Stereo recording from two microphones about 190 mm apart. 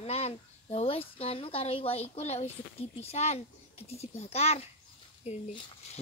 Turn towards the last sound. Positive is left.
turn(degrees=30)  # may be behind; listen again after turning